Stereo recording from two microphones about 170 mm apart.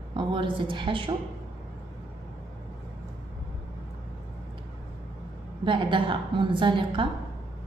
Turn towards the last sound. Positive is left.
turn(degrees=-30)  # may be behind; listen again after turning